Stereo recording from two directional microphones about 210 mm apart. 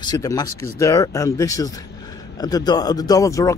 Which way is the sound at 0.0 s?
20° left (ahead or behind).